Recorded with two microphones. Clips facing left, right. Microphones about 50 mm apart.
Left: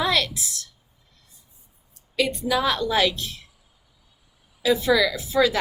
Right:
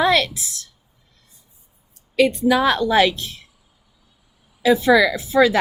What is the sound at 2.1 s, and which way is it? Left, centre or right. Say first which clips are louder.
A woman's voice: right 7 dB; right.